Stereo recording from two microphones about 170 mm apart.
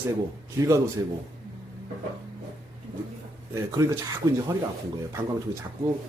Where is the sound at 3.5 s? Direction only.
20° right (ahead or behind).